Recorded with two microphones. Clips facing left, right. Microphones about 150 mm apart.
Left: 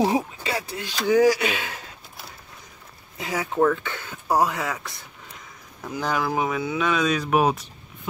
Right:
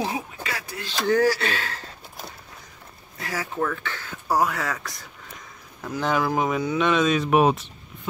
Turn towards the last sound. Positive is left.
turn(degrees=0)  # may be behind; listen again after turning